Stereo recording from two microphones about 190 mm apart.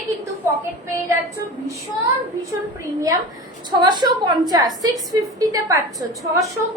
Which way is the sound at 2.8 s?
15° right (ahead or behind).